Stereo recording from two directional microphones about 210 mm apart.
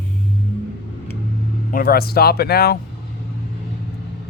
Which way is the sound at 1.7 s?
45° left (ahead or behind).